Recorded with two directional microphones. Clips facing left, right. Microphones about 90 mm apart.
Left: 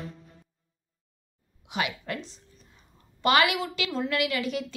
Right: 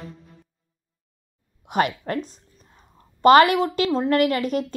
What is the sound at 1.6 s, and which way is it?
A woman's voice, 45° right (ahead or behind).